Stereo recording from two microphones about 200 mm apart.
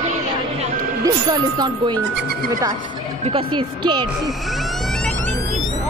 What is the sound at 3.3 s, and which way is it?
Speech, 25° right (ahead or behind).